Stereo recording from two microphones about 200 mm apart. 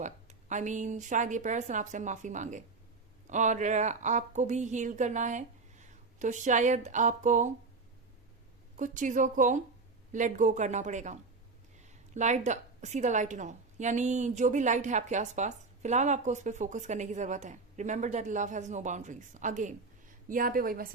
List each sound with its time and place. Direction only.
0.0 s a woman's voice: 35° right (ahead or behind)
8.8 s a woman's voice: 40° right (ahead or behind)